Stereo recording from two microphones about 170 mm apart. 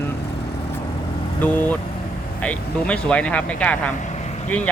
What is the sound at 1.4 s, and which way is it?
Speech, 10° left (ahead or behind).